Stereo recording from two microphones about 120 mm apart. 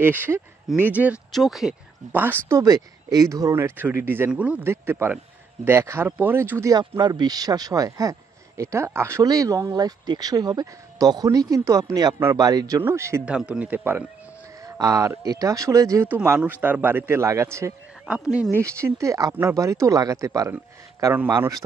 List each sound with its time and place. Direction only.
0.0 s speech: 20° right (ahead or behind)
1.3 s speech: centre (ahead or behind)
2.5 s speech: 30° right (ahead or behind)
7.0 s speech: 35° right (ahead or behind)
13.2 s speech: 10° right (ahead or behind)
14.6 s speech: 25° right (ahead or behind)
16.1 s speech: 10° right (ahead or behind)
18.0 s speech: 10° right (ahead or behind)
18.5 s speech: 20° right (ahead or behind)
20.5 s speech: 15° right (ahead or behind)